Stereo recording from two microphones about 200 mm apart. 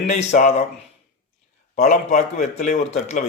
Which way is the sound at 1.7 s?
40° left (ahead or behind).